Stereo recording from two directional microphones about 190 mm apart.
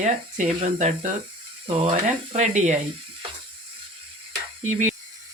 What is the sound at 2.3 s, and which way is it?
Speech, 40° right (ahead or behind).